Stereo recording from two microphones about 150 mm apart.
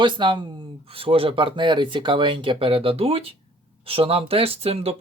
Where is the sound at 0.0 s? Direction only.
30° right (ahead or behind).